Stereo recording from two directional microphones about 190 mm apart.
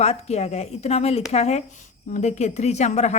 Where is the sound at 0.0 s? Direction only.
35° left (ahead or behind).